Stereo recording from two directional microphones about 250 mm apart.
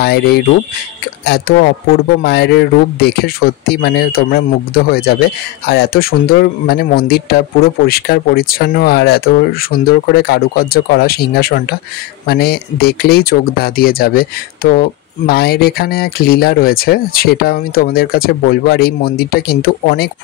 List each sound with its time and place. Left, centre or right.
0.0 s speech: left